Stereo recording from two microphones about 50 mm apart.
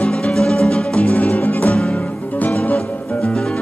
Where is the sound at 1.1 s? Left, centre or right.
Left.